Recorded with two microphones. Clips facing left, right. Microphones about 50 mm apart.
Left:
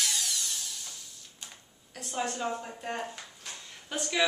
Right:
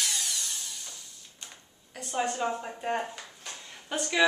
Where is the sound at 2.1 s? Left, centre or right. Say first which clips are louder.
Right 3 dB; centre.